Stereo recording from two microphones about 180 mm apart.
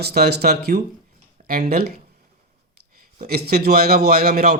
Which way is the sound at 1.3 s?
50° right (ahead or behind).